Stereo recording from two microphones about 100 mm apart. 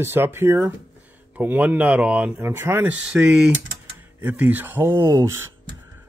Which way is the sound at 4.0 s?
20° right (ahead or behind).